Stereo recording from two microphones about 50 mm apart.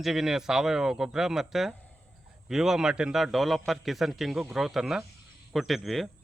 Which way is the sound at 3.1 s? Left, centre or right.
Centre.